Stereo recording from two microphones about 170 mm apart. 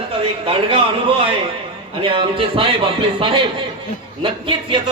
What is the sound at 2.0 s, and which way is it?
Speech, 30° right (ahead or behind).